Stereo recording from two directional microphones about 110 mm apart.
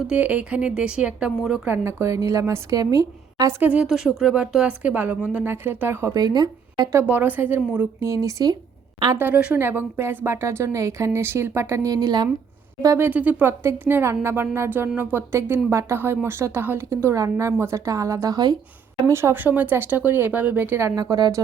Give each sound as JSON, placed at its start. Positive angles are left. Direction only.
{"t": 0.0, "sound": "speech", "side_deg": -10}
{"t": 1.6, "sound": "speech", "side_deg": -20}
{"t": 3.6, "sound": "speech", "side_deg": -15}
{"t": 3.8, "sound": "speech", "side_deg": -5}
{"t": 6.1, "sound": "speech", "side_deg": -40}
{"t": 6.9, "sound": "speech", "side_deg": -15}
{"t": 7.9, "sound": "speech", "side_deg": -30}
{"t": 9.1, "sound": "speech", "side_deg": -15}
{"t": 13.1, "sound": "speech", "side_deg": -15}
{"t": 19.1, "sound": "speech", "side_deg": -20}